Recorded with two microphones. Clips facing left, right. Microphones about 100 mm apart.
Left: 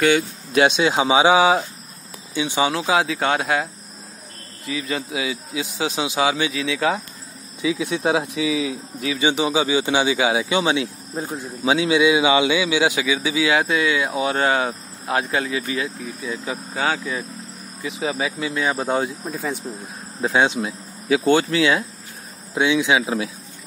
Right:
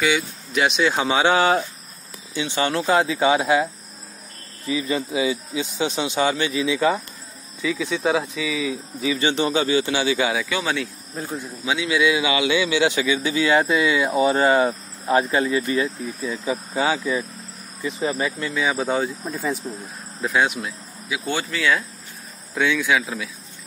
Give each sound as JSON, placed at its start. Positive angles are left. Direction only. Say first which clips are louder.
{"t": 0.9, "sound": "a man's voice", "louder": "left 3 dB", "side_deg": 15}
{"t": 2.7, "sound": "speech", "louder": "right 1 dB", "side_deg": 0}
{"t": 4.6, "sound": "speech", "louder": "right 3 dB", "side_deg": 0}
{"t": 5.2, "sound": "speech", "louder": "right 3 dB", "side_deg": 90}
{"t": 5.9, "sound": "speech", "louder": "left 1 dB", "side_deg": 5}
{"t": 7.6, "sound": "a man's voice", "louder": "left 1 dB", "side_deg": 15}
{"t": 11.4, "sound": "a man's voice", "louder": "left 7 dB", "side_deg": 30}
{"t": 12.0, "sound": "speech", "louder": "left 2 dB", "side_deg": 20}
{"t": 19.8, "sound": "speech", "louder": "left 3 dB", "side_deg": 30}